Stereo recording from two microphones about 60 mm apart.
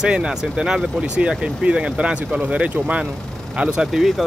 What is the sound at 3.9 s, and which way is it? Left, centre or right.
Speech, centre.